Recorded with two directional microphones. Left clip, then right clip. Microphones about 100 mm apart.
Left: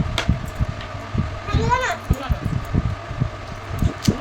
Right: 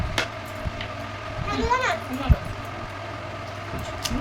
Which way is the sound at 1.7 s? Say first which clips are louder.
Left 2 dB; 10° left (ahead or behind).